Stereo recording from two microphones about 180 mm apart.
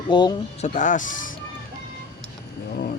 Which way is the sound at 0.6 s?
45° left (ahead or behind).